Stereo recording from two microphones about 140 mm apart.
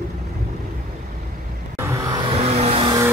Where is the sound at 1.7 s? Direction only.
20° right (ahead or behind); by 2.9 s 45° right (ahead or behind).